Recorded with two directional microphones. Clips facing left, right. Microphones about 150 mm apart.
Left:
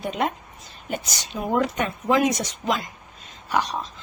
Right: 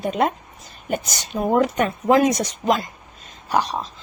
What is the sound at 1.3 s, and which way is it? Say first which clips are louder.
A woman's voice: right 5 dB; 40° right (ahead or behind).